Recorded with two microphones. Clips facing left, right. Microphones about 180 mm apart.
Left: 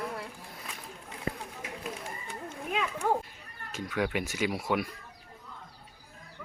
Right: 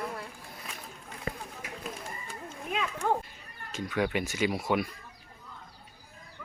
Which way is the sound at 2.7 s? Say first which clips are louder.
Even; 10° left (ahead or behind).